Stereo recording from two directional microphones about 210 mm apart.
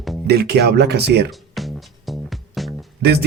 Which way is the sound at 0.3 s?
50° right (ahead or behind).